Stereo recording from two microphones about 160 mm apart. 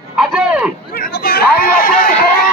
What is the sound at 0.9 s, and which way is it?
Chatter, 65° left (ahead or behind).